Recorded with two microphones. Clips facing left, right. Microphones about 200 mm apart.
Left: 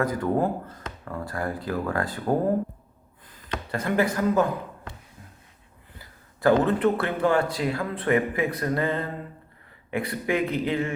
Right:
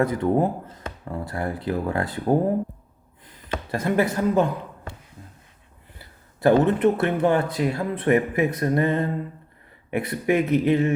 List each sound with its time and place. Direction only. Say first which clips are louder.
0.0 s speech: right 3 dB; 25° right (ahead or behind)
3.5 s speech: right 3 dB; 25° right (ahead or behind)
6.4 s speech: right 3 dB; 20° right (ahead or behind)